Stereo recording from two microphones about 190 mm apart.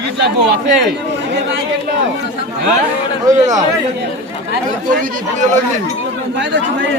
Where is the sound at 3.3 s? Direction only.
20° right (ahead or behind).